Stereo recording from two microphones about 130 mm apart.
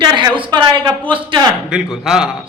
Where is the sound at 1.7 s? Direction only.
5° right (ahead or behind).